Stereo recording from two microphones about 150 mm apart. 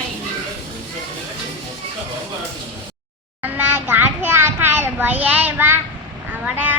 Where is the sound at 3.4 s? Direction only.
15° right (ahead or behind).